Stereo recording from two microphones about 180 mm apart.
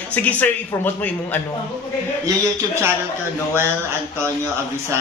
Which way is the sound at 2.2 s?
15° right (ahead or behind).